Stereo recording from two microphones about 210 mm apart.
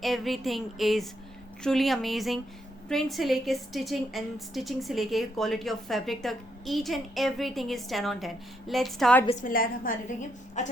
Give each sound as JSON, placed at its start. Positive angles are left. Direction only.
{"t": 0.0, "sound": "a woman's voice", "side_deg": 0}
{"t": 9.4, "sound": "a woman's voice", "side_deg": 40}